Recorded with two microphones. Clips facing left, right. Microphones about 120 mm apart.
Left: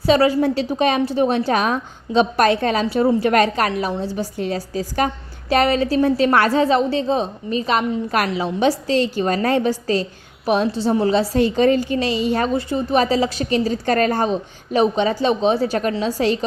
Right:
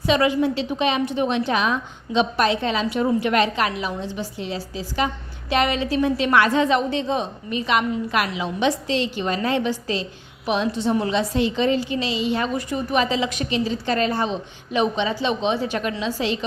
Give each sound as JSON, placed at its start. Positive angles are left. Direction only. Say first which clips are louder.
{"t": 0.0, "sound": "a woman's voice", "louder": "left 4 dB", "side_deg": 35}
{"t": 2.8, "sound": "a woman's voice", "louder": "left 4 dB", "side_deg": 30}
{"t": 12.5, "sound": "a woman's voice", "louder": "left 4 dB", "side_deg": 30}